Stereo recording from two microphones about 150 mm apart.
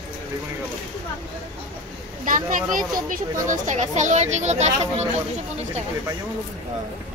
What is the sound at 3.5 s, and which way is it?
Speech, 55° right (ahead or behind).